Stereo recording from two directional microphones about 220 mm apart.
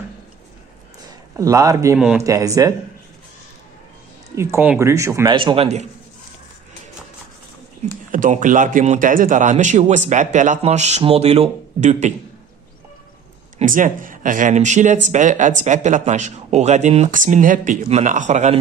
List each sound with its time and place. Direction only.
1.0 s a sound: 15° right (ahead or behind)
2.0 s speech: 5° right (ahead or behind)
2.2 s speech: 15° right (ahead or behind)
4.4 s speech: 10° right (ahead or behind); by 5.9 s 30° right (ahead or behind)
8.1 s a man's voice: 35° right (ahead or behind)
13.6 s a man's voice: 35° right (ahead or behind)